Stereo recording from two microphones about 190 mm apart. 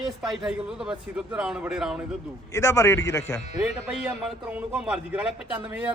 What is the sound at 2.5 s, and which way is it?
Speech, 15° left (ahead or behind).